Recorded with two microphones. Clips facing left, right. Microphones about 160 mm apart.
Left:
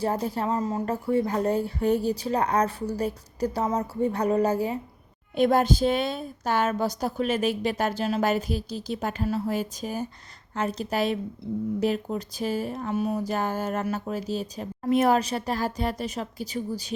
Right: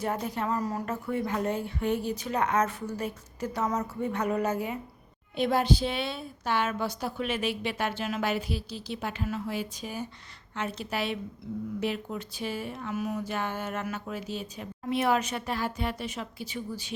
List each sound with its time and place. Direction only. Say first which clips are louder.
0.0 s speech: left 4 dB; 35° left (ahead or behind)
5.4 s a woman's voice: left 5 dB; 50° left (ahead or behind)
11.4 s speech: left 6 dB; 30° left (ahead or behind)